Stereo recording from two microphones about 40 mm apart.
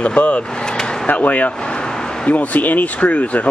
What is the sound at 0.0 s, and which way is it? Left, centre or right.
Speech, left.